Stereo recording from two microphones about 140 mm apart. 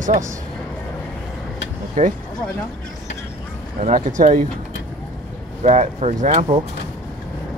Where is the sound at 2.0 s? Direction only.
65° right (ahead or behind).